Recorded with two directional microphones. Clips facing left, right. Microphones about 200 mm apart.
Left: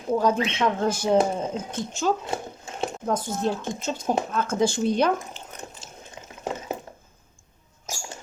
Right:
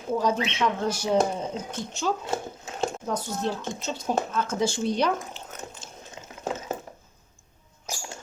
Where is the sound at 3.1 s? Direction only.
50° left (ahead or behind).